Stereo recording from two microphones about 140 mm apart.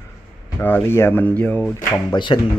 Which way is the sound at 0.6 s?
15° left (ahead or behind).